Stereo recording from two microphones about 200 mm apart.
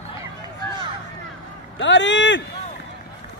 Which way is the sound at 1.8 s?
65° left (ahead or behind).